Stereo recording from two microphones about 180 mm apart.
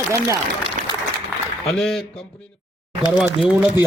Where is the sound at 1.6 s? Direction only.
Centre (ahead or behind).